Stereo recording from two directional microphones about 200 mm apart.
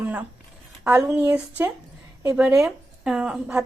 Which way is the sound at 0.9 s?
10° right (ahead or behind).